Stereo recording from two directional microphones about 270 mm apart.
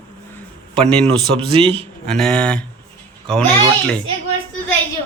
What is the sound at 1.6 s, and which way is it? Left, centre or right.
Speech, right.